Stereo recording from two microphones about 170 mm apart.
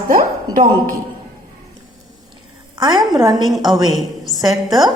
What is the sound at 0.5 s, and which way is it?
Speech, 55° right (ahead or behind).